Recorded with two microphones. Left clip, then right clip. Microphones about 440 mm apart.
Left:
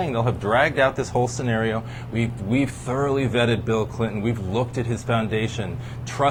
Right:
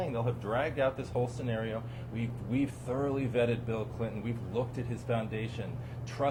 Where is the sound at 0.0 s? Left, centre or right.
Left.